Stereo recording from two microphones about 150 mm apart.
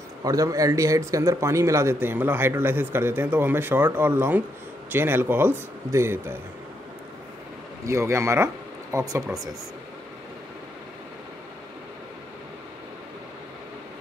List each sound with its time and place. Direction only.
0.2 s speech: 25° right (ahead or behind)
7.8 s speech: 20° right (ahead or behind)